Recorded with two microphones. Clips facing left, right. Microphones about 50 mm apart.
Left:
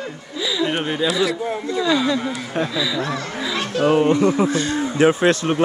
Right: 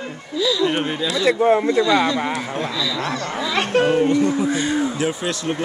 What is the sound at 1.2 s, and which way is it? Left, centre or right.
Speech, right.